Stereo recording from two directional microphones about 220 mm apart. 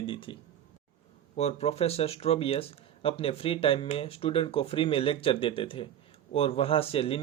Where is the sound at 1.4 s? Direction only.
30° left (ahead or behind).